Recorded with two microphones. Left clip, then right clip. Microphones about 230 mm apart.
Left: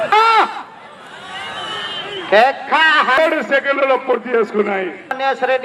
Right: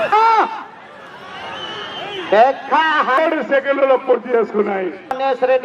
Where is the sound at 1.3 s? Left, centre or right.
Left.